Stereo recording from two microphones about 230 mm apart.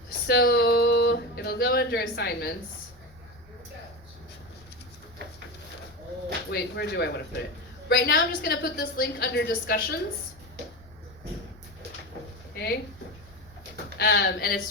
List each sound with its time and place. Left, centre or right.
0.3 s speech: left
6.5 s a woman's voice: left
12.5 s speech: left
14.0 s a woman's voice: left